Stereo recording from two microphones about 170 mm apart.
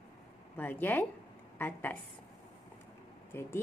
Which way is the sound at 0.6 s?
10° left (ahead or behind).